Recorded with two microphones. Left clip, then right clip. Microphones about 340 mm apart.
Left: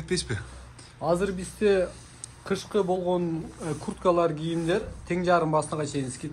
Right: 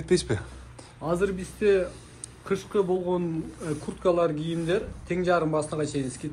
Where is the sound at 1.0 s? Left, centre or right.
Left.